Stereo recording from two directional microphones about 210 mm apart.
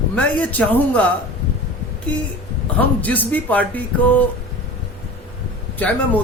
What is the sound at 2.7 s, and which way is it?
A man's voice, 5° left (ahead or behind).